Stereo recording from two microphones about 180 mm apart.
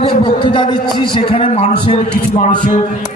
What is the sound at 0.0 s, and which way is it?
A man's voice, 25° left (ahead or behind).